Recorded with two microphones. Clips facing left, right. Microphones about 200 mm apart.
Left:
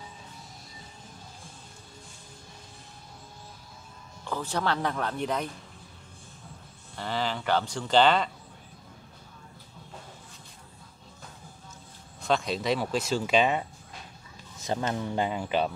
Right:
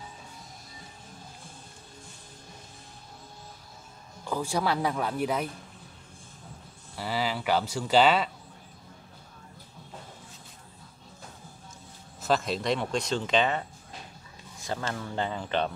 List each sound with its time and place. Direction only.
4.2 s speech: 10° right (ahead or behind)
7.0 s speech: 5° right (ahead or behind)
12.2 s speech: centre (ahead or behind)